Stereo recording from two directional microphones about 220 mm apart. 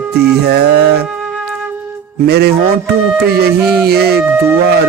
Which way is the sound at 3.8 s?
45° right (ahead or behind).